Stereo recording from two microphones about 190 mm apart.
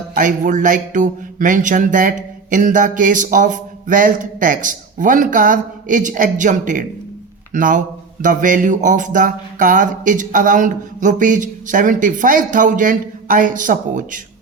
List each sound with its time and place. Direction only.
0.1 s speech: 45° right (ahead or behind)